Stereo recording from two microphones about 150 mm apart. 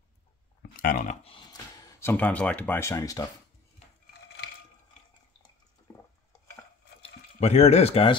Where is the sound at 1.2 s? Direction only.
35° left (ahead or behind).